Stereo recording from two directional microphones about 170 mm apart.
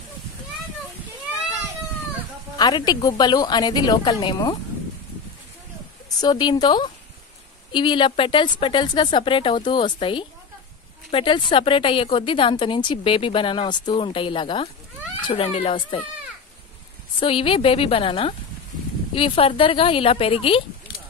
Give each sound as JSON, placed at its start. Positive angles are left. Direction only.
{"t": 2.5, "sound": "a woman's voice", "side_deg": 25}
{"t": 6.0, "sound": "a woman's voice", "side_deg": 25}
{"t": 17.2, "sound": "a woman's voice", "side_deg": 30}